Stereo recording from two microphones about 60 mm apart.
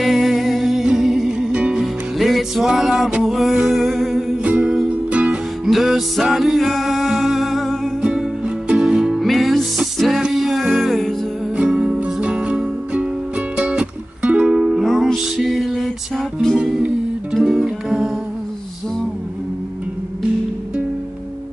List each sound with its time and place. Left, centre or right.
0.0 s music: centre
1.5 s music: centre
1.8 s music: centre
3.3 s a sound: centre
4.4 s music: centre
5.7 s music: centre
8.0 s music: centre
9.2 s music: centre
11.5 s music: centre
14.8 s music: centre
17.3 s music: centre